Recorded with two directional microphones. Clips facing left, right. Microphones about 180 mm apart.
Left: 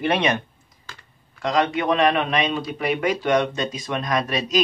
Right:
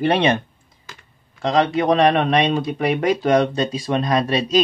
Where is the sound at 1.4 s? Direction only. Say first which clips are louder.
Right 4 dB; 30° right (ahead or behind).